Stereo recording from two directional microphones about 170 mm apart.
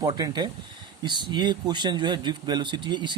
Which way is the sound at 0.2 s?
25° right (ahead or behind).